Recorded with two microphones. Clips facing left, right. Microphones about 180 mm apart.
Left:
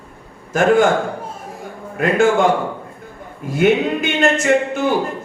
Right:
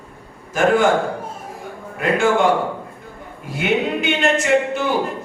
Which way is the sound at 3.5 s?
45° left (ahead or behind).